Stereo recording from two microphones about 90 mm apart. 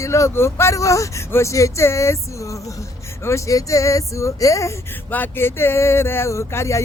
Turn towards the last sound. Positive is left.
turn(degrees=30)  # may be behind; listen again after turning